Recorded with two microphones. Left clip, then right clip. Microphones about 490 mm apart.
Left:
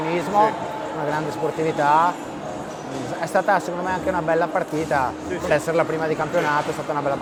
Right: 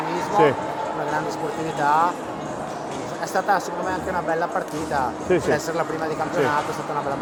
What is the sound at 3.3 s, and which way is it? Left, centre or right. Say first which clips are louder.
A woman's voice: left 2 dB; left.